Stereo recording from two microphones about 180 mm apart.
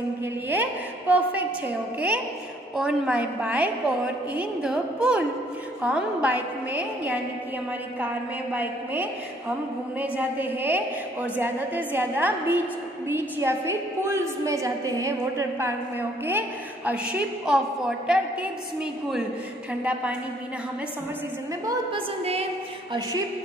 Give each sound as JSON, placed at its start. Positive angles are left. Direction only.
{"t": 0.2, "sound": "a sound", "side_deg": -10}
{"t": 2.0, "sound": "a woman's voice", "side_deg": -10}
{"t": 8.5, "sound": "a woman's voice", "side_deg": -10}
{"t": 19.8, "sound": "a woman's voice", "side_deg": -5}
{"t": 21.6, "sound": "a woman's voice", "side_deg": -30}